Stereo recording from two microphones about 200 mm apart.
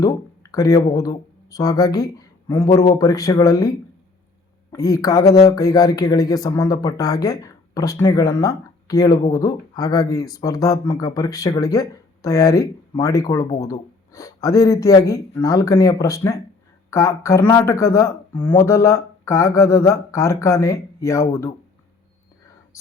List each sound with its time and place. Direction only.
0.0 s speech: 15° left (ahead or behind)